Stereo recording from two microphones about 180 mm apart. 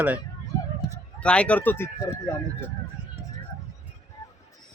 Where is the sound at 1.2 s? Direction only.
5° left (ahead or behind).